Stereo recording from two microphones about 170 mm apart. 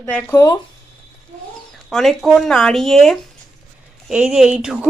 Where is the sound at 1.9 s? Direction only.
Centre (ahead or behind).